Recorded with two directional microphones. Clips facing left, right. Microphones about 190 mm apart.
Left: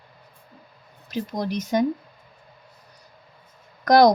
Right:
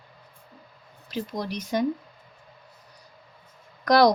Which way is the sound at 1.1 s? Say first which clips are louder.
Left 3 dB; 45° left (ahead or behind).